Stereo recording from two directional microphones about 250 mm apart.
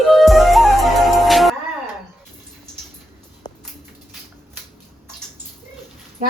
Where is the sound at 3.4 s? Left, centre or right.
Centre.